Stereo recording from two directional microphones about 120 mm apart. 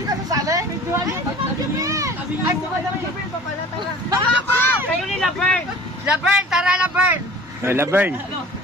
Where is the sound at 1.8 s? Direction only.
25° right (ahead or behind).